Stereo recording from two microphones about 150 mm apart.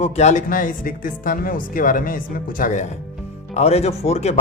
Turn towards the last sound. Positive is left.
turn(degrees=45)  # may be behind; listen again after turning